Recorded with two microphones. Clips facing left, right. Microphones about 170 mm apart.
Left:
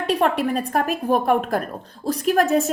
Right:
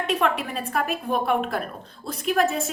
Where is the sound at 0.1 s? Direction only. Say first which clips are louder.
Left 6 dB; 40° left (ahead or behind).